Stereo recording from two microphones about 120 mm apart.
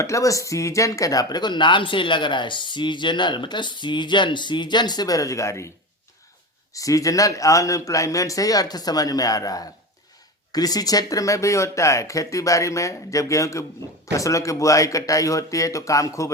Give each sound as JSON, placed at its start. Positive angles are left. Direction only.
{"t": 0.0, "sound": "speech", "side_deg": 25}
{"t": 6.7, "sound": "speech", "side_deg": 30}